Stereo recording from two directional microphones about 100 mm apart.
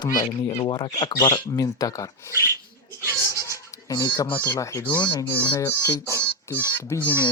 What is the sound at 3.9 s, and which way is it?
Speech, 45° left (ahead or behind).